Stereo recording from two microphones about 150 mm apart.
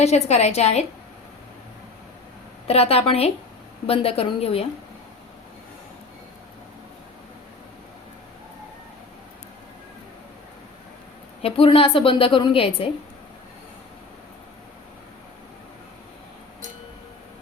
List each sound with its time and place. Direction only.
0.0 s a woman's voice: 45° left (ahead or behind)
2.6 s a woman's voice: 40° left (ahead or behind)
11.4 s a woman's voice: 40° left (ahead or behind)